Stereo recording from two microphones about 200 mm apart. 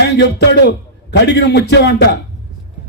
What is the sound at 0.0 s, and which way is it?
A man's voice, 55° left (ahead or behind).